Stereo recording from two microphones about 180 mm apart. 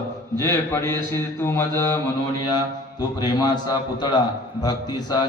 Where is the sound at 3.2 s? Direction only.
20° left (ahead or behind).